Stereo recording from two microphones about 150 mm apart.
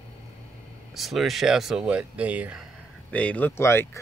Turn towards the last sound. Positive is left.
turn(degrees=20)  # may be behind; listen again after turning